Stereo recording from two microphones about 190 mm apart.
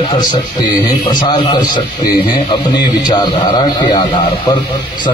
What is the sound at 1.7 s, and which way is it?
A man's voice, 25° left (ahead or behind).